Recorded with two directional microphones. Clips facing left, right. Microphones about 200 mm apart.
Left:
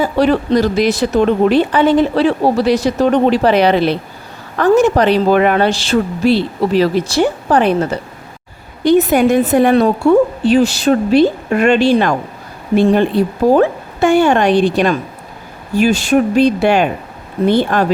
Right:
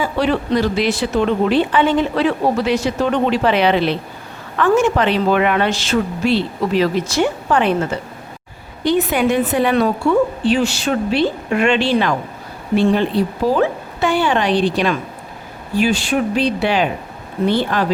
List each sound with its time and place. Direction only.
0.0 s speech: 40° left (ahead or behind)
10.4 s speech: 40° left (ahead or behind)